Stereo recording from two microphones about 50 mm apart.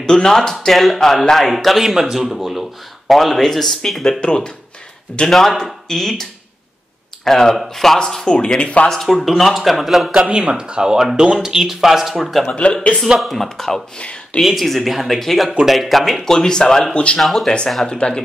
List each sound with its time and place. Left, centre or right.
0.0 s speech: centre
4.2 s speech: centre
5.3 s speech: centre
7.2 s speech: centre
8.3 s speech: centre
8.9 s speech: centre
10.3 s speech: centre
13.9 s speech: left
14.4 s speech: centre
16.3 s speech: centre
17.2 s speech: centre
17.5 s speech: centre